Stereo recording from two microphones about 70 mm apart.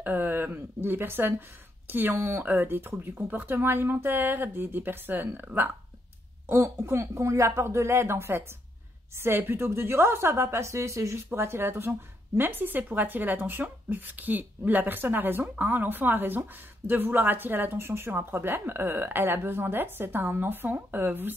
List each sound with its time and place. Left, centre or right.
0.0 s a woman's voice: right
6.4 s a woman's voice: right